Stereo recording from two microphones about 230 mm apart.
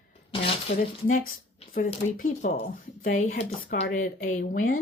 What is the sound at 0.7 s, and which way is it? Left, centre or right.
Speech, left.